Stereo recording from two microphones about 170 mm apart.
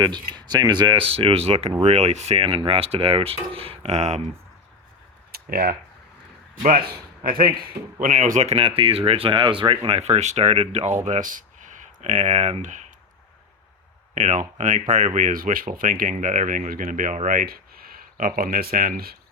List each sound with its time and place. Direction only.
0.0 s speech: 25° right (ahead or behind)
5.3 s a sound: 65° right (ahead or behind)
6.6 s speech: 50° right (ahead or behind)
8.0 s speech: 50° right (ahead or behind)
14.2 s speech: 45° right (ahead or behind)